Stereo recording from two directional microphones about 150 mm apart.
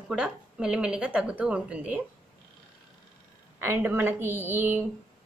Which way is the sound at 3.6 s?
15° right (ahead or behind).